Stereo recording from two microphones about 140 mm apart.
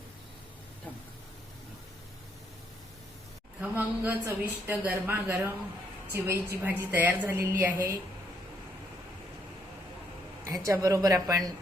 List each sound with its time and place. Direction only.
3.6 s a woman's voice: 15° right (ahead or behind)
10.4 s a woman's voice: 20° right (ahead or behind)